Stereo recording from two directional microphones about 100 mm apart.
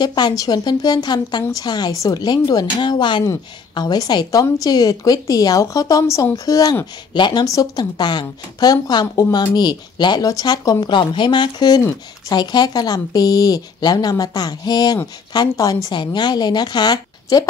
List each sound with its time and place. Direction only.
0.0 s a woman's voice: 45° left (ahead or behind)
7.2 s speech: 50° left (ahead or behind)
7.4 s speech: 40° left (ahead or behind)
10.9 s a woman's voice: 50° left (ahead or behind)